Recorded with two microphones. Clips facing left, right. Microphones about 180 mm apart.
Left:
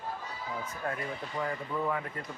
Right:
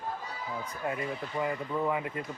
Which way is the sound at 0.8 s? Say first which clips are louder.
Right 3 dB; 15° right (ahead or behind).